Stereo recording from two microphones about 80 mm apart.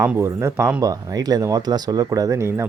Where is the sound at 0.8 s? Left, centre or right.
Right.